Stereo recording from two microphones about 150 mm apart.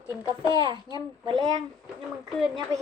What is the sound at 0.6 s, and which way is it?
A child's voice, 30° right (ahead or behind).